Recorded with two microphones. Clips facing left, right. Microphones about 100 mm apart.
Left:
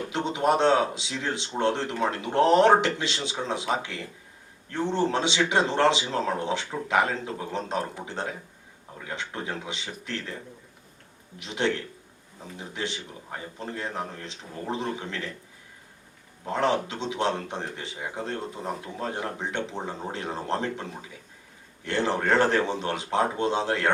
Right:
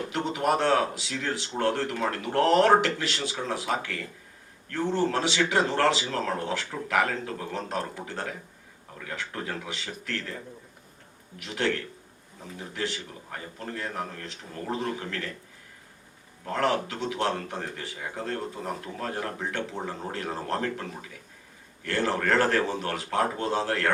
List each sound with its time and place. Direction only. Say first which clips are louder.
0.1 s a man's voice: left 2 dB; 20° left (ahead or behind)
11.3 s a man's voice: left 1 dB; 20° left (ahead or behind)
16.4 s a man's voice: left 1 dB; 20° left (ahead or behind)